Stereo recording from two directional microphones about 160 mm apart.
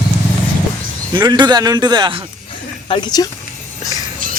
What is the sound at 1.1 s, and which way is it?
A man's voice, 30° right (ahead or behind).